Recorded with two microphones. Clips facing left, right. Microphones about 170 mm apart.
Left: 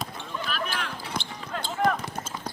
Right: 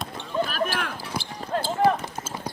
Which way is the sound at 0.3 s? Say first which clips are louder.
Right 7 dB; 45° right (ahead or behind).